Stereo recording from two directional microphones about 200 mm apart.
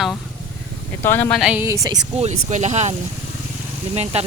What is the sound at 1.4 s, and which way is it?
Speech, 5° right (ahead or behind).